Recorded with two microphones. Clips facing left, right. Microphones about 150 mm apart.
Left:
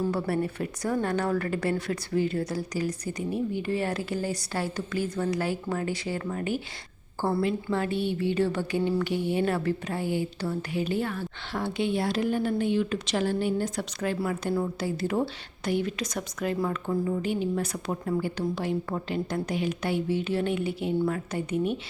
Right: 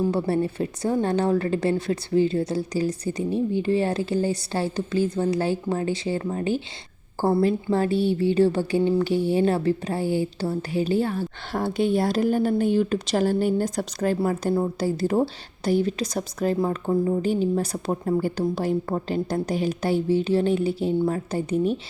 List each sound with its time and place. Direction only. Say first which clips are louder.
0.1 s a woman's voice: right 4 dB; 25° right (ahead or behind)